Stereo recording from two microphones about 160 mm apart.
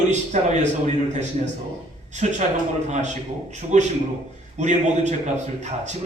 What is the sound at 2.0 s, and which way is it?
A man's voice, 45° right (ahead or behind).